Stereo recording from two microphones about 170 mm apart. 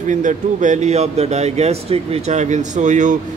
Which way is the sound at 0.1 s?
45° right (ahead or behind).